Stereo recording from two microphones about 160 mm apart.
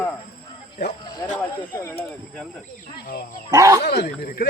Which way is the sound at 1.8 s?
10° left (ahead or behind).